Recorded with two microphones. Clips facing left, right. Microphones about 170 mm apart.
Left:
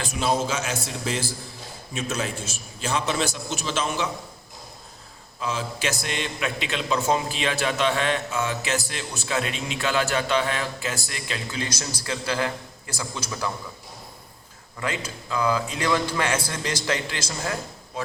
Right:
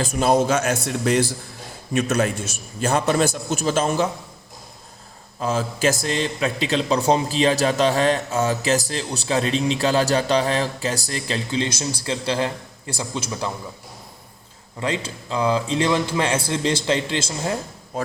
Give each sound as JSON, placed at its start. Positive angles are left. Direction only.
{"t": 0.0, "sound": "a man's voice", "side_deg": -50}
{"t": 2.8, "sound": "a man's voice", "side_deg": -50}
{"t": 5.4, "sound": "a man's voice", "side_deg": -40}
{"t": 14.8, "sound": "a man's voice", "side_deg": -30}